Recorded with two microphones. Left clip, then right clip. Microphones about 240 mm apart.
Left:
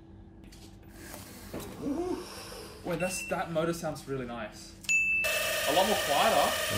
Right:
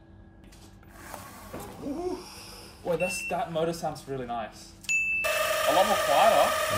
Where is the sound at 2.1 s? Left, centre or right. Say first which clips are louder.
Left 1 dB; centre.